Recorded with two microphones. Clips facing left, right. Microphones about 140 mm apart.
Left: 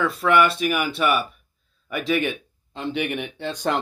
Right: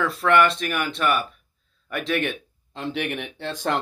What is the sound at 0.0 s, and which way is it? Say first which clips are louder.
Speech: even; centre (ahead or behind).